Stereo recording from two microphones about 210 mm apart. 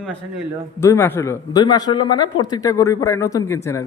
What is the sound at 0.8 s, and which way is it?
A man's voice, 15° left (ahead or behind).